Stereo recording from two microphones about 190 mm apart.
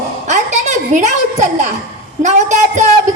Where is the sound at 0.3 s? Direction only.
40° right (ahead or behind).